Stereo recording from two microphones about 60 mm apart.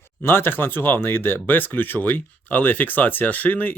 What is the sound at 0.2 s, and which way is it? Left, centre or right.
Speech, left.